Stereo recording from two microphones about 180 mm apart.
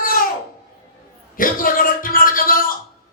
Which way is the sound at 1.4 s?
50° left (ahead or behind).